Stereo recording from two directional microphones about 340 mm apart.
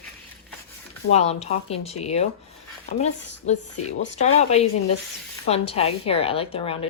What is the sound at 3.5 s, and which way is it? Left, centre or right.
A woman's voice, centre.